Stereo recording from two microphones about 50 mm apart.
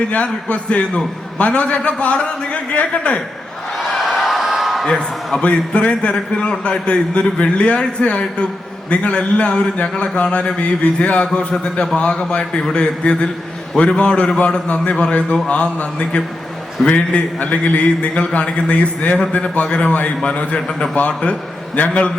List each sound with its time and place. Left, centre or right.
0.1 s a man's voice: left
3.9 s a sound: centre
4.9 s a man's voice: centre
5.4 s a man's voice: left
20.9 s a man's voice: left